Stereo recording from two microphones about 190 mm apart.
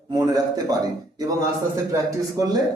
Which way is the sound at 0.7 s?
20° right (ahead or behind).